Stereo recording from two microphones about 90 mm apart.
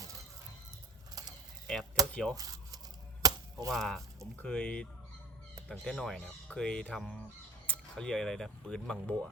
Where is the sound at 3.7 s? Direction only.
5° left (ahead or behind).